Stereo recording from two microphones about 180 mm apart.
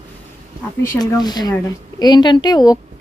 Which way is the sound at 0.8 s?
20° left (ahead or behind).